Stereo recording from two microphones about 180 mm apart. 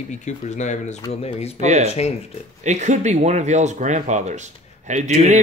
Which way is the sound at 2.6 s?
40° right (ahead or behind).